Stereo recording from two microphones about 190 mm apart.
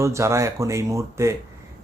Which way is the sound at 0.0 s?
15° right (ahead or behind).